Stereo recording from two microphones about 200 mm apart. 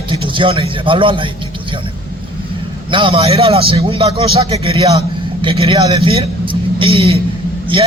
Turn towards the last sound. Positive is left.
turn(degrees=-25)  # may be behind; listen again after turning